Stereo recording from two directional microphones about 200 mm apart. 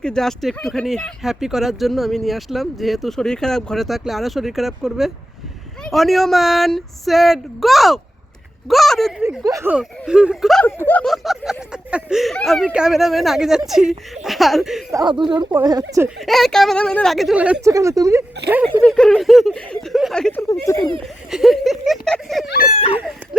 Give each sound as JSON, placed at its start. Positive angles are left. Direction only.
{"t": 0.0, "sound": "speech", "side_deg": 5}
{"t": 9.4, "sound": "speech", "side_deg": -15}
{"t": 14.9, "sound": "speech", "side_deg": -20}
{"t": 16.0, "sound": "speech", "side_deg": 0}
{"t": 18.8, "sound": "speech", "side_deg": 5}
{"t": 20.5, "sound": "speech", "side_deg": 15}
{"t": 21.2, "sound": "speech", "side_deg": 0}
{"t": 23.0, "sound": "a sound", "side_deg": -5}